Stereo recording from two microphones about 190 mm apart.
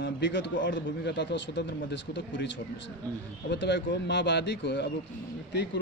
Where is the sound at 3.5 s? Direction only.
65° left (ahead or behind).